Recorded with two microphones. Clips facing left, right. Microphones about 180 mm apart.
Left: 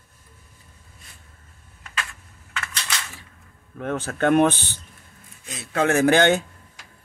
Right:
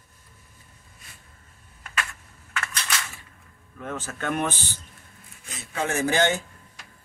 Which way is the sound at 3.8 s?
60° left (ahead or behind).